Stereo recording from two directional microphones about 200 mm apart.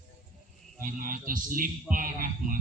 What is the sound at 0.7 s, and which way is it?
A man's voice, 45° right (ahead or behind).